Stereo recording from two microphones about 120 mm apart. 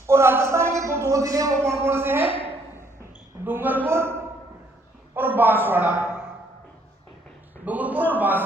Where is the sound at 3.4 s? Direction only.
15° right (ahead or behind).